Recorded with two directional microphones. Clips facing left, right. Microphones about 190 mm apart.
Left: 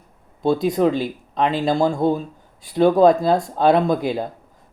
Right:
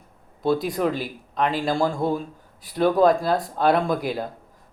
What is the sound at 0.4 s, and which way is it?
Speech, 25° left (ahead or behind).